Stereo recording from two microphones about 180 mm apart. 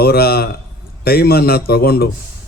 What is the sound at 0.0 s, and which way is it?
A man's voice, 60° left (ahead or behind).